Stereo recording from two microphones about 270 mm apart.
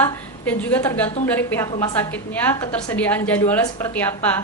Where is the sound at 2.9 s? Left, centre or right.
Centre.